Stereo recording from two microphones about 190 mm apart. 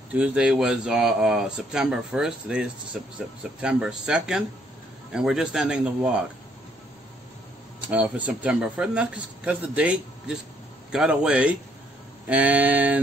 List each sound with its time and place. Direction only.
0.1 s speech: 5° right (ahead or behind)
7.8 s speech: 10° right (ahead or behind)